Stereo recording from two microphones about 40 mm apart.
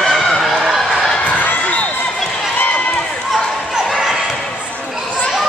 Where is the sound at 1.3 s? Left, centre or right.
Left.